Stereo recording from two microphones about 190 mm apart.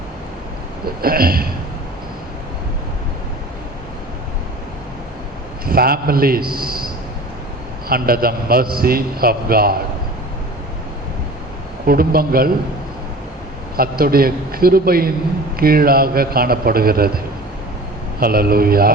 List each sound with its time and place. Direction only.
1.0 s a man's voice: 50° right (ahead or behind)
5.6 s a man's voice: 50° right (ahead or behind)
11.9 s a man's voice: 50° right (ahead or behind)
13.7 s a man's voice: 50° right (ahead or behind)
18.2 s a man's voice: 50° right (ahead or behind)